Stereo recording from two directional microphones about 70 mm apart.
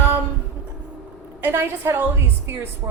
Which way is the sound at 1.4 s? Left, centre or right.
Right.